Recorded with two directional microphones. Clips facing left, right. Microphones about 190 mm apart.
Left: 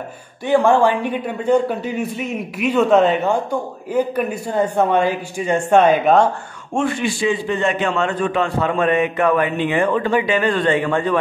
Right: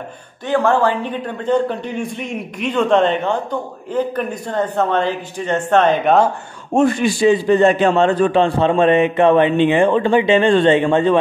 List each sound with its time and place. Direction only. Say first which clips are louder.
0.5 s a man's voice: left 2 dB; 15° left (ahead or behind)
6.7 s a man's voice: right 5 dB; 40° right (ahead or behind); by 11.1 s 25° right (ahead or behind)